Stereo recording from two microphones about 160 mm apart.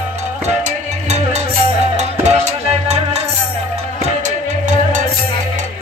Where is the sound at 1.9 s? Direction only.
45° right (ahead or behind).